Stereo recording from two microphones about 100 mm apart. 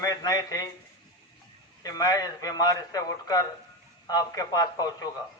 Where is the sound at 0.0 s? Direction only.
40° left (ahead or behind).